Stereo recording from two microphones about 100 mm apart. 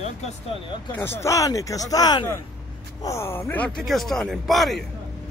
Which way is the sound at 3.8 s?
Centre (ahead or behind).